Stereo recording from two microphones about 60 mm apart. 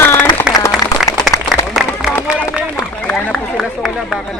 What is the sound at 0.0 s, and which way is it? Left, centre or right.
Applause, left.